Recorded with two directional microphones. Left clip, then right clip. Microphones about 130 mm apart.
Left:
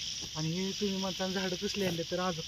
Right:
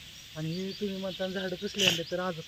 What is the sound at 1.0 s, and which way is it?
Speech, 15° left (ahead or behind).